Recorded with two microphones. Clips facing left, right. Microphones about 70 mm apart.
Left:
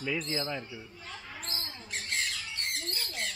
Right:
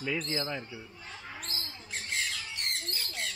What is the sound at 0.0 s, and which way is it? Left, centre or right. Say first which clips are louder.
Speech: even; centre.